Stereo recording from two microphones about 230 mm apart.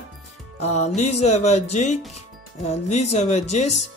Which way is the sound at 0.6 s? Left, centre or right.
Left.